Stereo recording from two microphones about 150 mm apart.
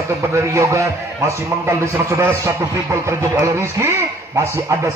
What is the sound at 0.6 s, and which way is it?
A man's voice, 20° right (ahead or behind).